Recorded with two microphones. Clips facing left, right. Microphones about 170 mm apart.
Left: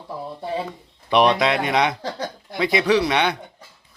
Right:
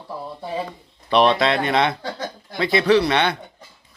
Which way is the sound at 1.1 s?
15° left (ahead or behind).